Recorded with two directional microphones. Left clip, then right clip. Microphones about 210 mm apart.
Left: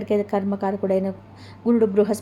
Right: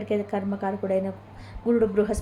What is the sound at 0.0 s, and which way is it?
A woman's voice, 30° left (ahead or behind).